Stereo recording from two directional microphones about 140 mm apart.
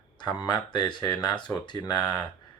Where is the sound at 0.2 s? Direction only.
30° left (ahead or behind).